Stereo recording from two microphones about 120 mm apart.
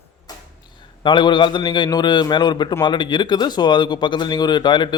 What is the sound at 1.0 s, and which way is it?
Speech, 40° left (ahead or behind).